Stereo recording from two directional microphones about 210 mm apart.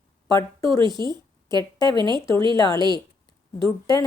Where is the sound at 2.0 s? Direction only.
20° right (ahead or behind).